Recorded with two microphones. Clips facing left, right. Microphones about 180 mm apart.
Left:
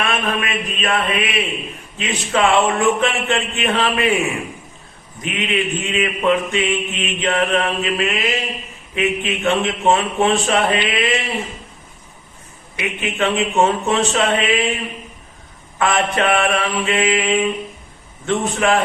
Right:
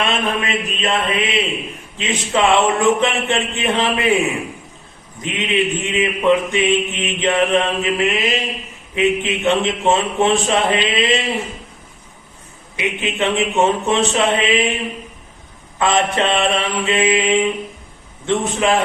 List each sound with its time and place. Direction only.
0.0 s mantra: 25° right (ahead or behind)
2.0 s a man's voice: 20° right (ahead or behind)
5.2 s mantra: 20° right (ahead or behind)
12.7 s a man's voice: 20° right (ahead or behind)
15.8 s mantra: 20° right (ahead or behind)
18.3 s a man's voice: 20° right (ahead or behind)